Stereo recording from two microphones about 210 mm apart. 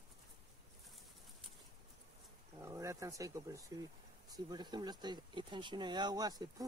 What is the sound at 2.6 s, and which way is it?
Speech, 15° right (ahead or behind).